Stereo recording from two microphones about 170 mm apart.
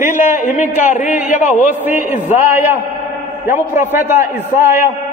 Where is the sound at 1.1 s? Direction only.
10° right (ahead or behind).